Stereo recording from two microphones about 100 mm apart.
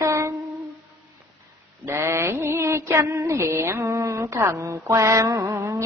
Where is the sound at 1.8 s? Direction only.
30° right (ahead or behind).